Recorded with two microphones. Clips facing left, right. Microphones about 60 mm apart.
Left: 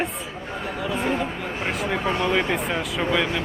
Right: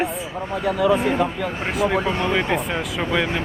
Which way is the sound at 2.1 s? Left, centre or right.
Centre.